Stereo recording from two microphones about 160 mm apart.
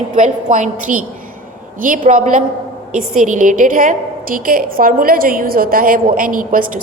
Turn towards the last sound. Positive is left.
turn(degrees=-55)  # may be behind; listen again after turning